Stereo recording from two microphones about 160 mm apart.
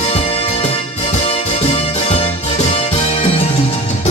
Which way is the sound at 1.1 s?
40° left (ahead or behind).